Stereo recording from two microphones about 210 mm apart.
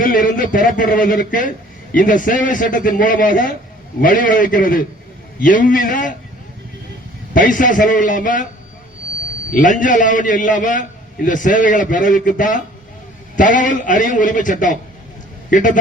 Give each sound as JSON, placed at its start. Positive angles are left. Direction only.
{"t": 0.0, "sound": "a man's voice", "side_deg": 40}
{"t": 7.3, "sound": "a man's voice", "side_deg": 40}
{"t": 9.5, "sound": "a man's voice", "side_deg": 40}